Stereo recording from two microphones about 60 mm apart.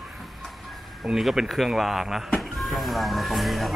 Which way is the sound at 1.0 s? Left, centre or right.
Centre.